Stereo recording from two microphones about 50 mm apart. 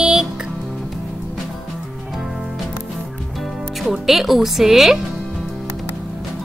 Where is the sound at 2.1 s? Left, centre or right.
Centre.